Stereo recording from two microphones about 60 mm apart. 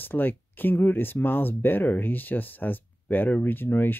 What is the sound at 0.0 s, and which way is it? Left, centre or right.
Speech, left.